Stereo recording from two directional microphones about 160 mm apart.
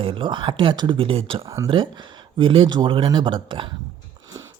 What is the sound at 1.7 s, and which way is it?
Speech, 30° right (ahead or behind).